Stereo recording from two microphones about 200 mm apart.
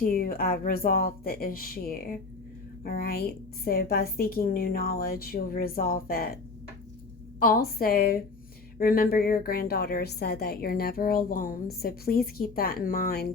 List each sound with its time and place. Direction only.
0.1 s a woman's voice: 45° left (ahead or behind)